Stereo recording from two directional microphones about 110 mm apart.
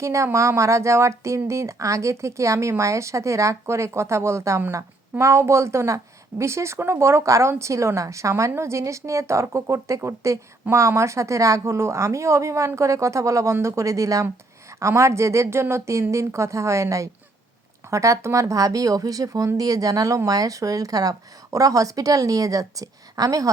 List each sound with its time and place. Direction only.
0.0 s speech: 25° right (ahead or behind)